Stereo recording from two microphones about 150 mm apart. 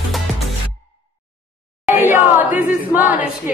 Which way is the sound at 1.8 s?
15° right (ahead or behind).